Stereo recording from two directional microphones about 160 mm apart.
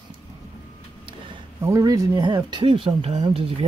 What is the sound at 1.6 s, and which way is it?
Speech, 20° right (ahead or behind).